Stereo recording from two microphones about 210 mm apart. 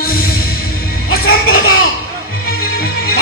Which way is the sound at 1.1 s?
45° left (ahead or behind).